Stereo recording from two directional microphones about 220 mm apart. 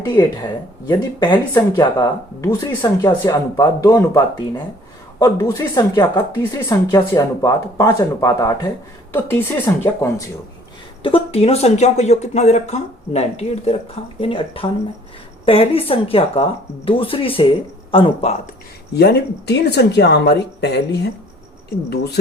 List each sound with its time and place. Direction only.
0.0 s speech: 20° left (ahead or behind)
1.3 s speech: 10° left (ahead or behind)
11.0 s speech: 25° left (ahead or behind)
18.9 s speech: 50° left (ahead or behind)